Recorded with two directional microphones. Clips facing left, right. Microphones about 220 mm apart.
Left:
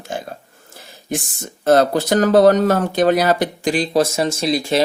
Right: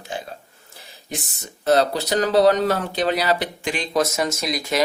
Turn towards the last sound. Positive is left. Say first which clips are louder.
# left 5 dB
turn(degrees=30)  # may be behind; listen again after turning